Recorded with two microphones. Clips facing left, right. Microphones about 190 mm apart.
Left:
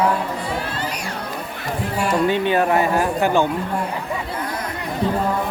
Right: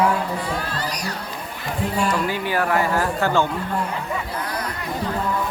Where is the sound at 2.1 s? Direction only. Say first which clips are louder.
Left 5 dB; 25° left (ahead or behind).